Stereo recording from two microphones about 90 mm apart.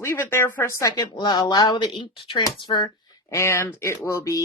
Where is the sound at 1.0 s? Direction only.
55° left (ahead or behind).